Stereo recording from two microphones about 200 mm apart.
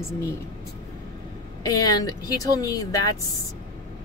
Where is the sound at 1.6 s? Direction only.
20° left (ahead or behind).